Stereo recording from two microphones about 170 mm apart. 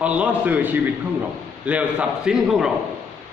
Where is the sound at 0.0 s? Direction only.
10° right (ahead or behind).